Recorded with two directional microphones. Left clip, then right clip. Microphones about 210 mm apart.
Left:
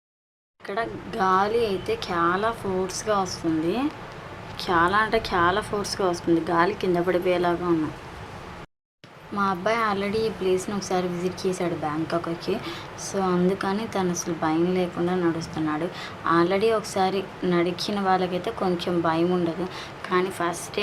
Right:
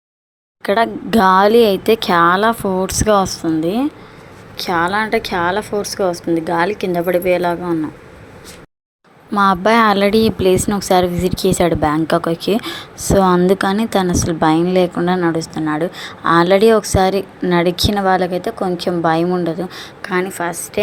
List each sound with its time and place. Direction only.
0.6 s a woman's voice: 45° right (ahead or behind)
4.5 s a woman's voice: 25° right (ahead or behind)
9.3 s a woman's voice: 40° right (ahead or behind); by 20.6 s 25° right (ahead or behind)